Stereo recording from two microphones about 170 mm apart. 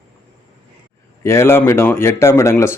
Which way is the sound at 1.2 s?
15° left (ahead or behind).